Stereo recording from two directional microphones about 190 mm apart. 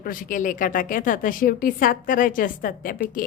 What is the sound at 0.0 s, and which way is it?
A woman's voice, 45° left (ahead or behind).